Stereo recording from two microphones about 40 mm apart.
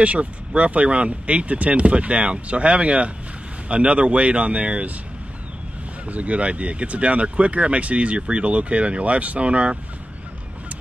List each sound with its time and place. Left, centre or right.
0.0 s speech: right
6.0 s speech: right